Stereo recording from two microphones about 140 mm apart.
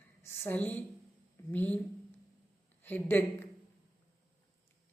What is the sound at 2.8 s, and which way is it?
Speech, 15° left (ahead or behind).